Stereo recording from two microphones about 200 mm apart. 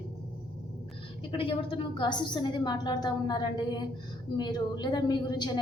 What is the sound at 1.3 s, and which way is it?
A woman's voice, 25° left (ahead or behind).